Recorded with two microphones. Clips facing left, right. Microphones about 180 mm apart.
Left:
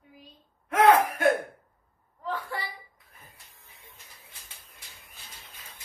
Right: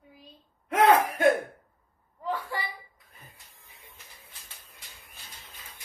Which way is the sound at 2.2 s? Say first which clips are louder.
Right 1 dB; 10° right (ahead or behind).